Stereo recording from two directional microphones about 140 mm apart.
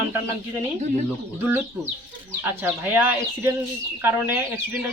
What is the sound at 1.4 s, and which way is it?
Speech, 15° right (ahead or behind).